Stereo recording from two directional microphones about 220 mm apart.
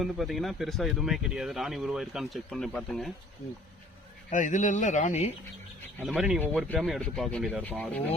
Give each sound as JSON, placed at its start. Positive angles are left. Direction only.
{"t": 0.0, "sound": "speech", "side_deg": 0}
{"t": 4.3, "sound": "speech", "side_deg": 35}
{"t": 6.0, "sound": "speech", "side_deg": 0}